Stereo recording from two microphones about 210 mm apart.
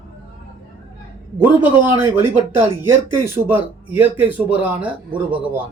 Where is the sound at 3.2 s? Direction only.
10° right (ahead or behind).